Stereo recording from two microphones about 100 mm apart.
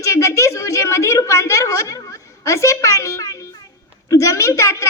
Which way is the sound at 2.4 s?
30° left (ahead or behind).